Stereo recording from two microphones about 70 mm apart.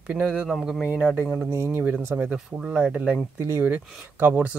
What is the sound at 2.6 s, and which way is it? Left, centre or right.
Speech, centre.